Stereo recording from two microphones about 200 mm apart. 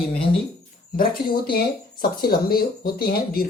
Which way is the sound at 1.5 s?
50° left (ahead or behind).